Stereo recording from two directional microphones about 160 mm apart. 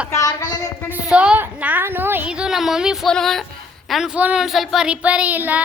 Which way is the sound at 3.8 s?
5° right (ahead or behind).